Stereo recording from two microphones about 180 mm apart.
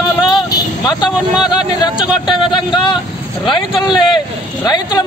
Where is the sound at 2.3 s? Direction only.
25° left (ahead or behind).